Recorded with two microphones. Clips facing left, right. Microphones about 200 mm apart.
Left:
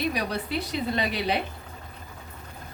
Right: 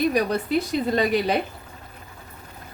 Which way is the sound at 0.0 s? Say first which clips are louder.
Right 7 dB; 45° right (ahead or behind).